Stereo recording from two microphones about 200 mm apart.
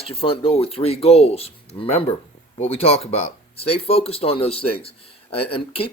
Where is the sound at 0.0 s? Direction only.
30° left (ahead or behind).